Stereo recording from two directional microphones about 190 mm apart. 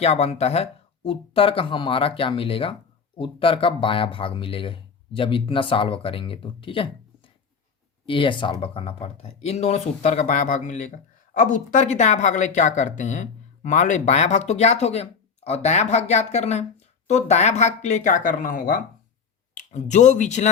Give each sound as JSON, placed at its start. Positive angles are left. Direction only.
{"t": 0.0, "sound": "speech", "side_deg": 35}